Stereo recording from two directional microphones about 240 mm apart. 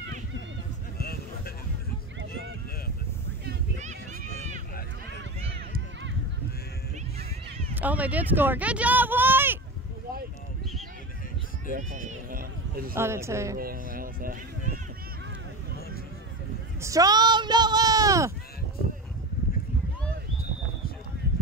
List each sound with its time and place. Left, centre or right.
0.9 s a sound: left
3.8 s a sound: right
7.7 s speech: centre
11.7 s speech: right
12.9 s speech: centre
13.6 s speech: right
16.8 s speech: centre